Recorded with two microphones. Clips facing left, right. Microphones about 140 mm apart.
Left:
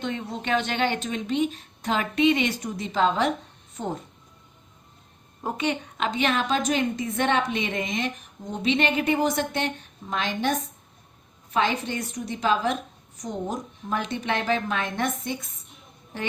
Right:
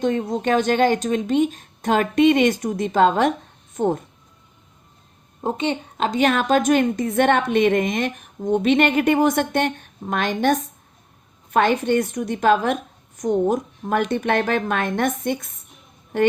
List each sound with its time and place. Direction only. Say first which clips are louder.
0.0 s a woman's voice: right 9 dB; 40° right (ahead or behind)
5.4 s a woman's voice: right 4 dB; 25° right (ahead or behind); by 10.5 s 55° right (ahead or behind)
11.5 s speech: right 8 dB; 55° right (ahead or behind)